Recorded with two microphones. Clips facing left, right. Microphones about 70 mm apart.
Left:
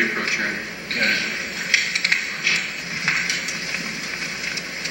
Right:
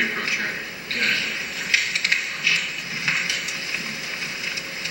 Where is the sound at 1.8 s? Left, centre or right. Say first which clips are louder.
Left 1 dB; left.